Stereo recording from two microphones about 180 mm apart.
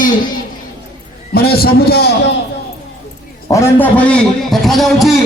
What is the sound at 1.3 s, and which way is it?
Speech, 60° left (ahead or behind).